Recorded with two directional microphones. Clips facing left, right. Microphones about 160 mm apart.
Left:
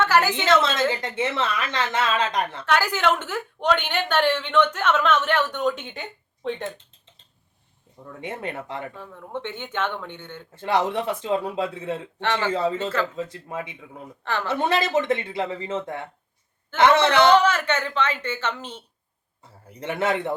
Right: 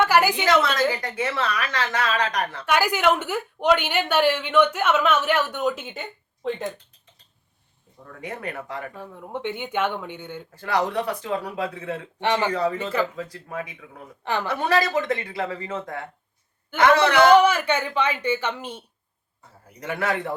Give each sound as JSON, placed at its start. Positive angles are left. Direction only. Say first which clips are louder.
{"t": 0.0, "sound": "a sound", "louder": "right 1 dB", "side_deg": -10}
{"t": 0.6, "sound": "a woman's voice", "louder": "even", "side_deg": 25}
{"t": 2.6, "sound": "a woman's voice", "louder": "right 2 dB", "side_deg": -10}
{"t": 8.2, "sound": "a woman's voice", "louder": "left 1 dB", "side_deg": 25}
{"t": 9.0, "sound": "a woman's voice", "louder": "right 1 dB", "side_deg": -15}
{"t": 10.5, "sound": "a woman's voice", "louder": "left 1 dB", "side_deg": 25}
{"t": 12.2, "sound": "a woman's voice", "louder": "right 3 dB", "side_deg": -15}
{"t": 12.5, "sound": "a woman's voice", "louder": "even", "side_deg": 25}
{"t": 12.7, "sound": "a woman's voice", "louder": "even", "side_deg": -15}
{"t": 13.1, "sound": "a woman's voice", "louder": "left 1 dB", "side_deg": 25}
{"t": 17.2, "sound": "a woman's voice", "louder": "right 2 dB", "side_deg": -10}
{"t": 19.8, "sound": "a woman's voice", "louder": "left 2 dB", "side_deg": 25}